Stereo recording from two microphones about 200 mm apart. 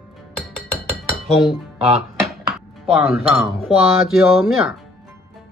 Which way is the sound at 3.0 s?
10° right (ahead or behind).